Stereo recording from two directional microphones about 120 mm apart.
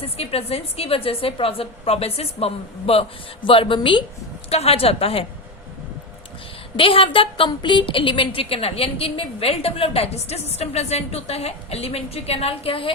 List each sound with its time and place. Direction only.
0.0 s a woman's voice: 55° left (ahead or behind)
4.4 s a woman's voice: 60° left (ahead or behind)
6.7 s a woman's voice: 50° left (ahead or behind)